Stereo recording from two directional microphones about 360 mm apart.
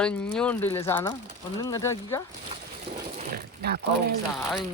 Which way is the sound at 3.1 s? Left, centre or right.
Right.